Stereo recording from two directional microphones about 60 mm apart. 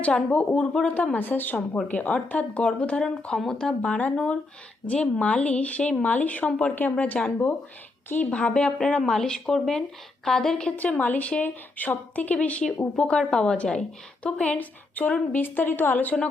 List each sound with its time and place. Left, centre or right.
0.0 s a woman's voice: left
1.1 s a woman's voice: left; by 3.8 s centre
3.8 s a woman's voice: left
10.8 s a woman's voice: left